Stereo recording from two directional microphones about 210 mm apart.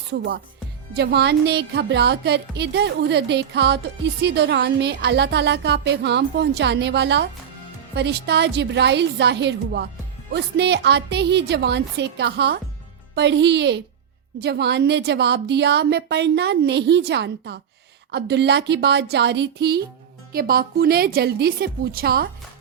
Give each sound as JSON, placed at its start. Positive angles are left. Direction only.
{"t": 0.9, "sound": "a woman's voice", "side_deg": -55}